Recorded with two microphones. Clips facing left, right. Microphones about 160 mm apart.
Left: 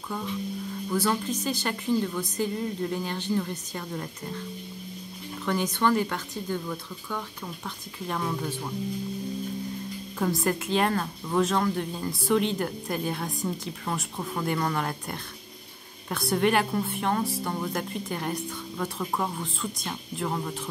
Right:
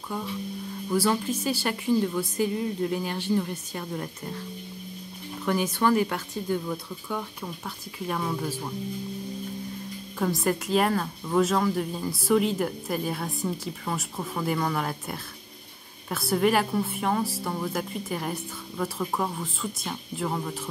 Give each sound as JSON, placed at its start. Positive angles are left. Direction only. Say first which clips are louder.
{"t": 0.8, "sound": "speech", "louder": "right 2 dB", "side_deg": -10}
{"t": 5.4, "sound": "speech", "louder": "right 1 dB", "side_deg": -10}
{"t": 10.1, "sound": "speech", "louder": "right 1 dB", "side_deg": 0}